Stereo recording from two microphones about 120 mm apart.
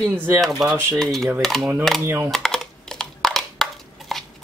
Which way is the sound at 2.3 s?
5° left (ahead or behind).